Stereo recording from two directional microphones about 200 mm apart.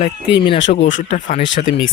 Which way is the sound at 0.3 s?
25° left (ahead or behind).